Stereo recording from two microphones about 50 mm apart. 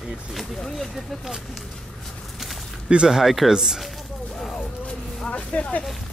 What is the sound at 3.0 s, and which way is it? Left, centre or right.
Speech, centre.